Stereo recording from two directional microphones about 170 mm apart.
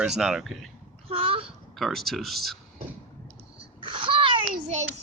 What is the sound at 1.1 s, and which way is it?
Speech, 35° right (ahead or behind).